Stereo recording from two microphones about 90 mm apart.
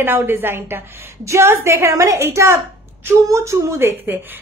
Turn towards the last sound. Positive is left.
turn(degrees=-30)  # may be behind; listen again after turning